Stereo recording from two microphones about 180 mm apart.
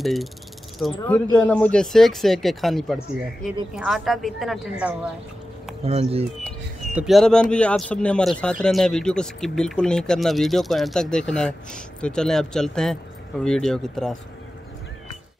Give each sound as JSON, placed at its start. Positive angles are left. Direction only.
{"t": 0.0, "sound": "speech", "side_deg": 0}
{"t": 5.9, "sound": "speech", "side_deg": -35}
{"t": 6.9, "sound": "speech", "side_deg": -5}